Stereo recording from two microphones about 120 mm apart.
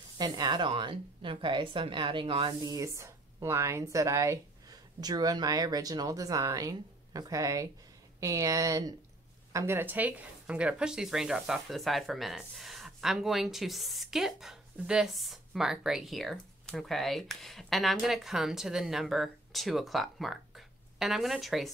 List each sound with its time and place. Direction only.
0.2 s a woman's voice: 35° right (ahead or behind); by 21.6 s centre (ahead or behind)